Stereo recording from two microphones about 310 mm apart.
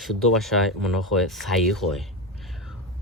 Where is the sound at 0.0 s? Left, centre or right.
Centre.